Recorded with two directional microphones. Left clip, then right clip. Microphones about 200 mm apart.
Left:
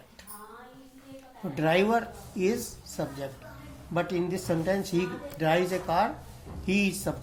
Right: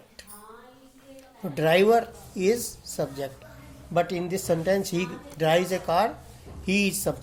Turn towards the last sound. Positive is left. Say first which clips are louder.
# right 3 dB
turn(degrees=-55)  # may be behind; listen again after turning